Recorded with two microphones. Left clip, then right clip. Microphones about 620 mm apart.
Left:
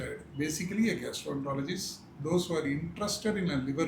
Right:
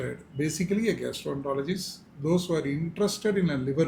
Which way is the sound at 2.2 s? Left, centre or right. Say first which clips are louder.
Right 3 dB; right.